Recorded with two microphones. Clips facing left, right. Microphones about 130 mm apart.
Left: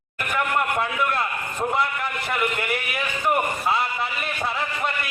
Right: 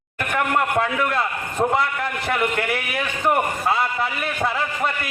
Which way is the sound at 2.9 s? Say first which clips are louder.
Right 2 dB; 50° right (ahead or behind).